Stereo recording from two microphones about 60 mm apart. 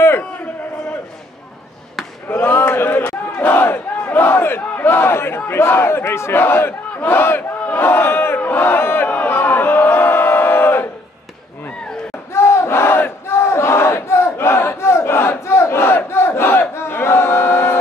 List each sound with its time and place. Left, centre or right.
2.2 s battle cry: left
8.4 s crowd: left
12.3 s battle cry: left